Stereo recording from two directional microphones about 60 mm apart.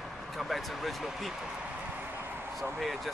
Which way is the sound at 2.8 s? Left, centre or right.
Centre.